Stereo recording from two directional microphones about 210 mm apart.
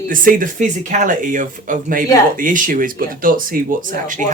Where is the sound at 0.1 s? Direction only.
40° right (ahead or behind).